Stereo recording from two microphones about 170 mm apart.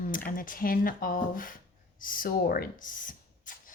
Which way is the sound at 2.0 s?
55° left (ahead or behind).